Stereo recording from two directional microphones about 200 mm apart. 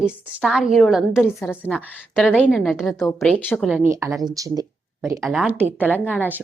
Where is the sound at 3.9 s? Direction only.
15° right (ahead or behind).